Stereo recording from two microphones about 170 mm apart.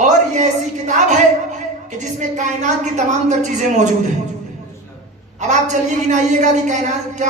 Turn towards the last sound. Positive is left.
turn(degrees=-45)  # may be behind; listen again after turning